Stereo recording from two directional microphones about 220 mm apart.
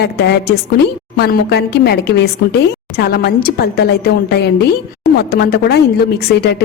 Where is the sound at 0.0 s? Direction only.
50° left (ahead or behind).